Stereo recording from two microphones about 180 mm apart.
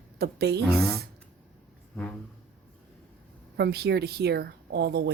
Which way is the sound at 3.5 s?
65° right (ahead or behind).